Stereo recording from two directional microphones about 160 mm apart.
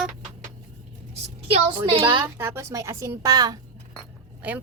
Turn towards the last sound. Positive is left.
turn(degrees=-10)  # may be behind; listen again after turning